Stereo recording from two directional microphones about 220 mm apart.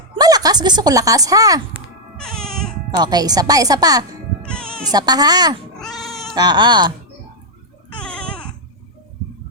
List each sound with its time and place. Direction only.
0.2 s speech: 15° right (ahead or behind)
2.1 s cat: 5° left (ahead or behind)
2.9 s speech: 20° right (ahead or behind)
4.4 s music: 5° left (ahead or behind)
4.9 s speech: 15° right (ahead or behind)
5.7 s cat: centre (ahead or behind)
6.3 s speech: 20° right (ahead or behind)
7.9 s baby cry: 5° left (ahead or behind)